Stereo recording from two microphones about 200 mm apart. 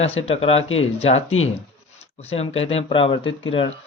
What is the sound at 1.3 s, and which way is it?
Speech, 90° left.